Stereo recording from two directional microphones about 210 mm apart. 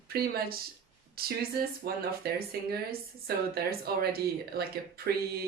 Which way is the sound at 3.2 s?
50° right (ahead or behind).